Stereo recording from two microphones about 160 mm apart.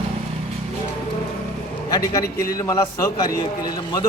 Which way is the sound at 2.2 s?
70° left (ahead or behind).